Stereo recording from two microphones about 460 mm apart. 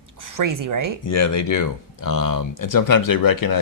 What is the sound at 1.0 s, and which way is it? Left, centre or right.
Speech, left.